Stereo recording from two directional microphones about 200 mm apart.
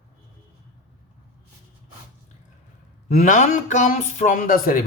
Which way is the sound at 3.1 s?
40° left (ahead or behind).